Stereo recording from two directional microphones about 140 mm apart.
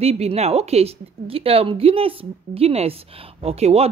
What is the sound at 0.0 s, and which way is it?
A woman's voice, 45° right (ahead or behind).